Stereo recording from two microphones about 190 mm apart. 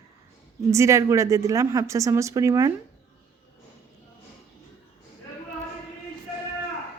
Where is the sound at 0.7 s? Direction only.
15° right (ahead or behind).